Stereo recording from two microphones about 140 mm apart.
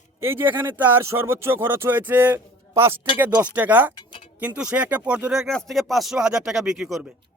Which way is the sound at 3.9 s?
35° left (ahead or behind).